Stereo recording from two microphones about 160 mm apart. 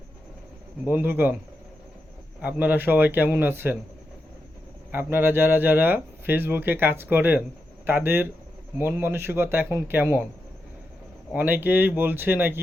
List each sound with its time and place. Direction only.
0.9 s speech: 10° right (ahead or behind)
2.4 s speech: 10° right (ahead or behind)
4.9 s speech: 15° right (ahead or behind)
11.3 s speech: 10° right (ahead or behind)